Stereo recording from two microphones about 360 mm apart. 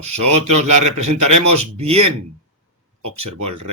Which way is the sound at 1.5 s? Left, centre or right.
Centre.